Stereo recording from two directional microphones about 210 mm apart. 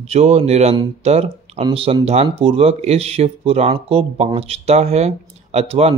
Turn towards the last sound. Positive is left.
turn(degrees=-30)  # may be behind; listen again after turning